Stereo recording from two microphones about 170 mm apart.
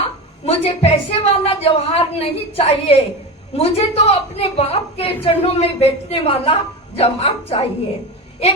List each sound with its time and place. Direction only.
0.0 s a woman's voice: 35° left (ahead or behind)